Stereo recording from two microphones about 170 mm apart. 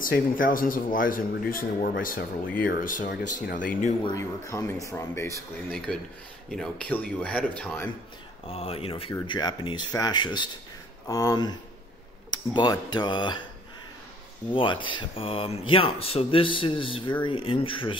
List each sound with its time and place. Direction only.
0.0 s speech: 55° left (ahead or behind)
4.0 s speech: 20° left (ahead or behind)
8.5 s speech: 35° left (ahead or behind)
14.5 s speech: 30° left (ahead or behind)